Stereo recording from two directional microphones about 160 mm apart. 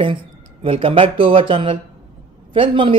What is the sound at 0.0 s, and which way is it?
Speech, 30° right (ahead or behind).